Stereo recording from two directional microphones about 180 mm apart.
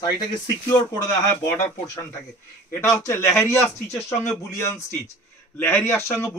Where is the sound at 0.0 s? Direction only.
20° left (ahead or behind).